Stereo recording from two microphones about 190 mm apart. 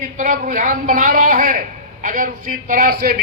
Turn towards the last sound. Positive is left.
turn(degrees=-50)  # may be behind; listen again after turning